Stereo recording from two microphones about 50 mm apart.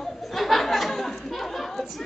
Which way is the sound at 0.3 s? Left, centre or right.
Centre.